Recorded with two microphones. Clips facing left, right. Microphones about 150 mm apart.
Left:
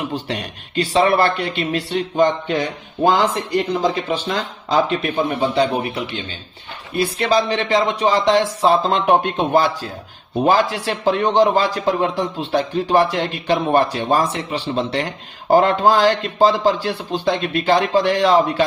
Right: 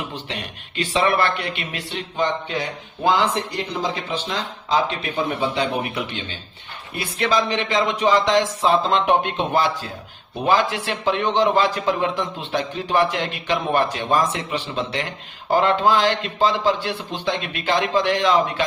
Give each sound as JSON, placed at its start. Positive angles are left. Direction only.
{"t": 0.1, "sound": "a man's voice", "side_deg": 40}
{"t": 7.2, "sound": "a man's voice", "side_deg": 35}